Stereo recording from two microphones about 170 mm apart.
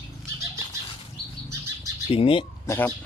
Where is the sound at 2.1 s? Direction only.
35° left (ahead or behind).